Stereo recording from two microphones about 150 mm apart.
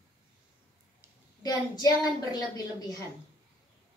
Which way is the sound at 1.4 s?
25° left (ahead or behind).